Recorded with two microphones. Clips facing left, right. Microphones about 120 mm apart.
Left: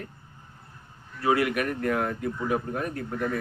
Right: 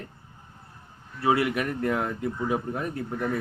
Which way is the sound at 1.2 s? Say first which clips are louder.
Even; 25° right (ahead or behind).